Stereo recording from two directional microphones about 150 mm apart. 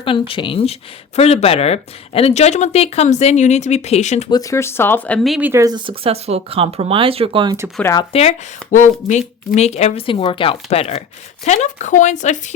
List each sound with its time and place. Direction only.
0.0 s speech: 35° left (ahead or behind)
4.3 s speech: 25° left (ahead or behind); by 5.4 s 5° left (ahead or behind)
5.4 s speech: 15° right (ahead or behind)
5.6 s speech: 30° right (ahead or behind)
8.1 s speech: 45° left (ahead or behind)